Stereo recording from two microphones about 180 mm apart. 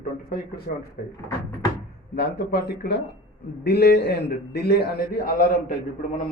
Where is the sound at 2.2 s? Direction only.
60° left (ahead or behind).